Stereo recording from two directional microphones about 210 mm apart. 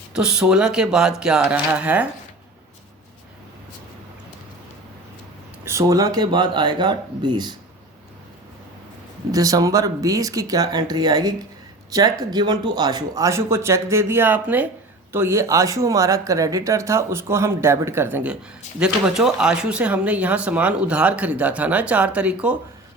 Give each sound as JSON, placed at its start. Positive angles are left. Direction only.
{"t": 0.1, "sound": "speech", "side_deg": -5}
{"t": 5.6, "sound": "speech", "side_deg": -15}
{"t": 9.3, "sound": "speech", "side_deg": -15}